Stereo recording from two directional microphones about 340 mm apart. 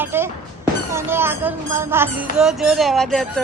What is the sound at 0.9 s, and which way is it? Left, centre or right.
Speech, centre.